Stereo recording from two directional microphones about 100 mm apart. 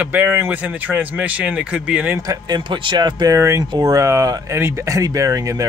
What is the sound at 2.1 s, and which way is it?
Speech, 40° right (ahead or behind).